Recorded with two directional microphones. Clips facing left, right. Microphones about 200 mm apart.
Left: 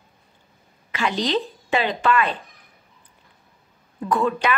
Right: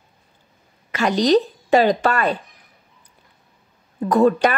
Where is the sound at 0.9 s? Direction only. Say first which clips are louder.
Right 7 dB; 45° right (ahead or behind).